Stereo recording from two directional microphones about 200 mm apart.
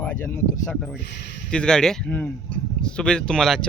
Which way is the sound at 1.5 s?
5° left (ahead or behind).